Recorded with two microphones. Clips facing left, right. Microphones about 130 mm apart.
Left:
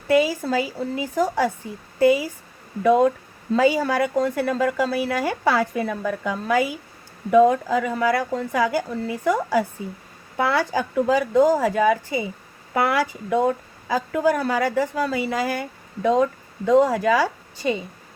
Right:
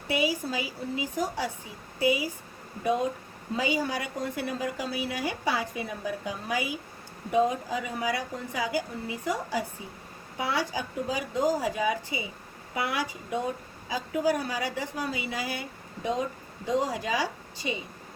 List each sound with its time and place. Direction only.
0.1 s speech: 45° left (ahead or behind)
0.4 s a woman's voice: 55° left (ahead or behind)
2.0 s speech: 45° left (ahead or behind)
2.8 s a woman's voice: 60° left (ahead or behind)
3.8 s a woman's voice: 70° left (ahead or behind); by 12.2 s 50° left (ahead or behind)
13.3 s a woman's voice: 55° left (ahead or behind)
14.9 s speech: 70° left (ahead or behind)
15.2 s speech: 45° left (ahead or behind)
16.0 s a woman's voice: 55° left (ahead or behind)